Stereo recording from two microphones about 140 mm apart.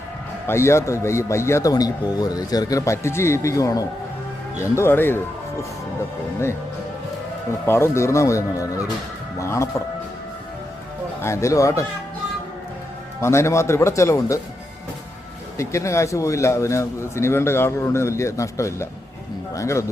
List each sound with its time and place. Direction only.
0.4 s a man's voice: 20° left (ahead or behind)
7.7 s a man's voice: 20° left (ahead or behind)
9.4 s a man's voice: 20° left (ahead or behind)
11.2 s a man's voice: 20° left (ahead or behind)
13.2 s a man's voice: 20° left (ahead or behind)
15.5 s a man's voice: 20° left (ahead or behind)